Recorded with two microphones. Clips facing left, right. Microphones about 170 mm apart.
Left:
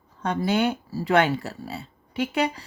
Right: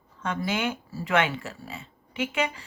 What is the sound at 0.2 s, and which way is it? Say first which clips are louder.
Speech: left 5 dB; 35° left (ahead or behind).